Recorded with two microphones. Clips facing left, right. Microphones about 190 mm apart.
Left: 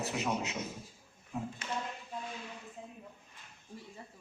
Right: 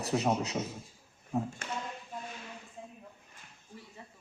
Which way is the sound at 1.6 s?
50° right (ahead or behind).